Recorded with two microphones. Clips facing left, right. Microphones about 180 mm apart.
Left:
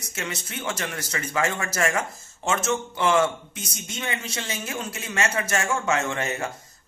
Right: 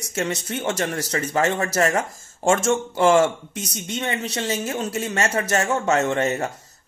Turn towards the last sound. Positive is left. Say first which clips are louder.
# right 6 dB
turn(degrees=-40)  # may be behind; listen again after turning